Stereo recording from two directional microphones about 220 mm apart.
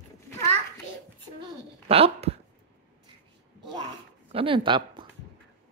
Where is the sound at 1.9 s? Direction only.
25° right (ahead or behind).